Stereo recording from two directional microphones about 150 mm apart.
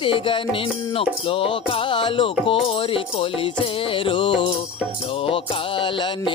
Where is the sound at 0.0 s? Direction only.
35° left (ahead or behind).